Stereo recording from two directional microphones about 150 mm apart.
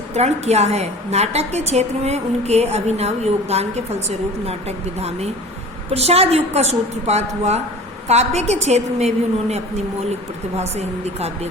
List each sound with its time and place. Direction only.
0.1 s a woman's voice: 45° right (ahead or behind)